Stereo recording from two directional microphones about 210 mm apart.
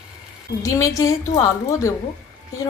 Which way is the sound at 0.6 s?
15° left (ahead or behind).